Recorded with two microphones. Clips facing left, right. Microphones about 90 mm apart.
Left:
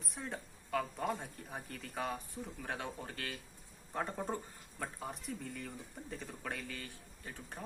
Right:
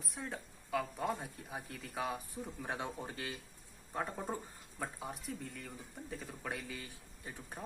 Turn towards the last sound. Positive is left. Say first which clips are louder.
# even
turn(degrees=-15)  # may be behind; listen again after turning